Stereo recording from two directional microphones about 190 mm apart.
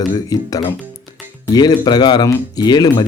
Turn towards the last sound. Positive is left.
turn(degrees=20)  # may be behind; listen again after turning